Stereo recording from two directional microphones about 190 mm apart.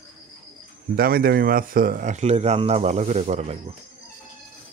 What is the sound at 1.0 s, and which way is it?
Speech, 50° right (ahead or behind).